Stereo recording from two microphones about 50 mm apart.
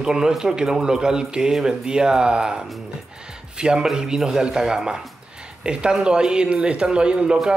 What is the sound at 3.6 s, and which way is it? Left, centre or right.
Speech, centre.